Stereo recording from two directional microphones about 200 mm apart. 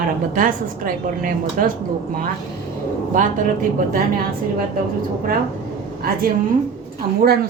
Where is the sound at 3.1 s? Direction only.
40° right (ahead or behind).